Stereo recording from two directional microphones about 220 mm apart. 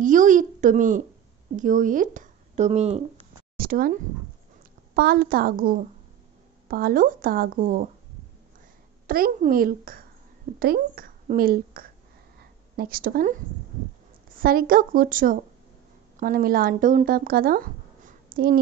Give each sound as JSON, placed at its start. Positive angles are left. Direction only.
{"t": 0.0, "sound": "a woman's voice", "side_deg": -35}
{"t": 3.5, "sound": "a sound", "side_deg": -40}
{"t": 4.9, "sound": "a woman's voice", "side_deg": -45}
{"t": 9.0, "sound": "a woman's voice", "side_deg": -40}
{"t": 12.4, "sound": "a sound", "side_deg": -45}
{"t": 14.3, "sound": "a woman's voice", "side_deg": -40}